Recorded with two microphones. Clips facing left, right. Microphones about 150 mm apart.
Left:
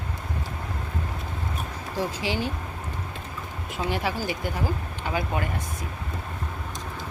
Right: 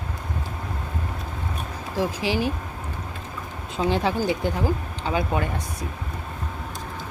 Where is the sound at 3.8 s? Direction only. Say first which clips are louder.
Right 5 dB; 25° right (ahead or behind).